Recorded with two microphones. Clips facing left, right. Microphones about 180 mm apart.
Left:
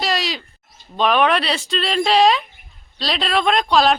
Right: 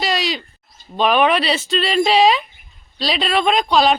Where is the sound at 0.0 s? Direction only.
Centre (ahead or behind).